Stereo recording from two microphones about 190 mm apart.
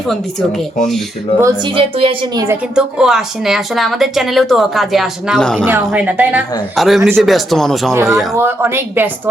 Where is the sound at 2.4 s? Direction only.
10° right (ahead or behind).